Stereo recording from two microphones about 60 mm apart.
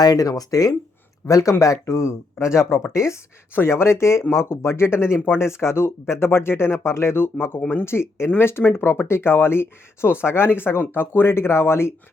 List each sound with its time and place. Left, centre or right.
0.0 s speech: left
1.3 s speech: left
3.5 s speech: left